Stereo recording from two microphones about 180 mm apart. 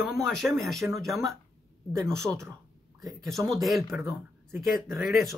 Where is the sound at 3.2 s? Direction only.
20° right (ahead or behind).